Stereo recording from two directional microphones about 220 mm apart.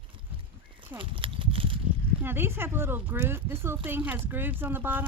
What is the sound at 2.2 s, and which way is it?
Speech, 10° right (ahead or behind).